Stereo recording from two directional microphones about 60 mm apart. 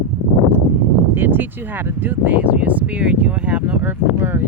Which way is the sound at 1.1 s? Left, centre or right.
Right.